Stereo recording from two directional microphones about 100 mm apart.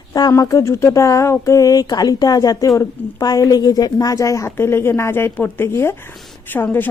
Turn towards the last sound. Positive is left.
turn(degrees=20)  # may be behind; listen again after turning